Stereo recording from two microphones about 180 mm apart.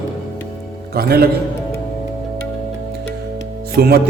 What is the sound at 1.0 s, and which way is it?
Speech, 60° right (ahead or behind).